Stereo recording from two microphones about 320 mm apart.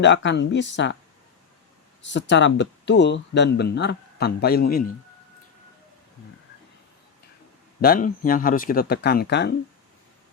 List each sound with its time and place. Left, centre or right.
0.0 s speech: left
2.0 s speech: left
7.8 s speech: left